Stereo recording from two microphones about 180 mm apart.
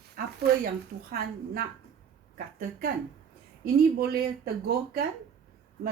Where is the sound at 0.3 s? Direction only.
60° right (ahead or behind).